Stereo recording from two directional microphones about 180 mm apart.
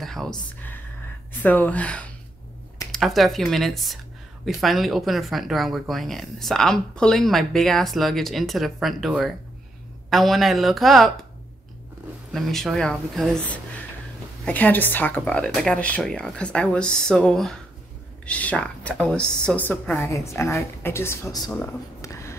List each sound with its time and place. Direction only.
0.0 s a sound: centre (ahead or behind)
1.4 s a woman's voice: 10° left (ahead or behind)
12.3 s a woman's voice: centre (ahead or behind)